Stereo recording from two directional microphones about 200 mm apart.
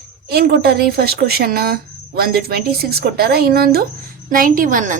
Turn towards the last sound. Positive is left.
turn(degrees=-40)  # may be behind; listen again after turning